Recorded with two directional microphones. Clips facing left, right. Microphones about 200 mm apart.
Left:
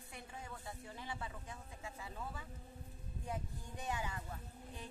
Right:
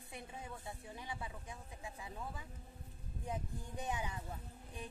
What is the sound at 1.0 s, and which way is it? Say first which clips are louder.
Speech: left 1 dB; 15° right (ahead or behind).